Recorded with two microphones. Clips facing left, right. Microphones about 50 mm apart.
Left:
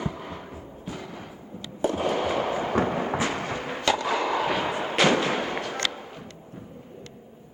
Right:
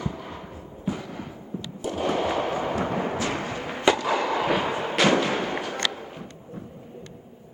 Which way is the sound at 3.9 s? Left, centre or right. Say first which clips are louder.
Right 3 dB; centre.